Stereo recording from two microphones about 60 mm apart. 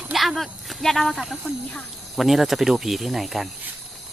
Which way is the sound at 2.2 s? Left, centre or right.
Centre.